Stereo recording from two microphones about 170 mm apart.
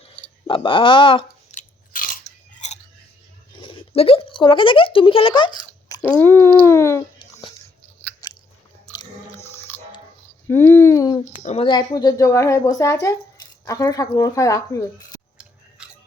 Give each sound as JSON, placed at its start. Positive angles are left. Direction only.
{"t": 0.4, "sound": "speech", "side_deg": 30}
{"t": 1.5, "sound": "biting", "side_deg": 55}
{"t": 2.5, "sound": "chewing", "side_deg": 45}
{"t": 3.5, "sound": "speech", "side_deg": 30}
{"t": 6.0, "sound": "speech", "side_deg": 10}
{"t": 8.2, "sound": "biting", "side_deg": 20}
{"t": 10.4, "sound": "a sound", "side_deg": 15}
{"t": 11.3, "sound": "speech", "side_deg": 40}
{"t": 15.8, "sound": "chewing", "side_deg": -5}